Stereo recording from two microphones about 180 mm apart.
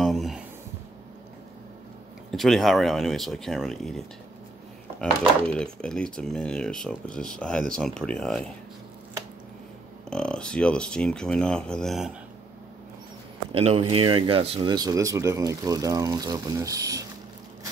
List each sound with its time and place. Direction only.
0.0 s a sound: centre (ahead or behind)
2.3 s speech: centre (ahead or behind)
5.5 s speech: 5° left (ahead or behind)
10.0 s speech: 5° left (ahead or behind)
13.5 s speech: 35° right (ahead or behind)